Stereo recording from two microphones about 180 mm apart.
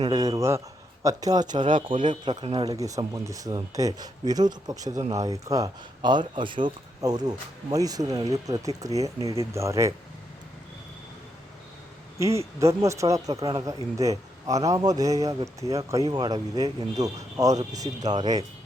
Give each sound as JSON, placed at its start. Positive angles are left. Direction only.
{"t": 0.0, "sound": "speech", "side_deg": -20}
{"t": 12.5, "sound": "speech", "side_deg": -15}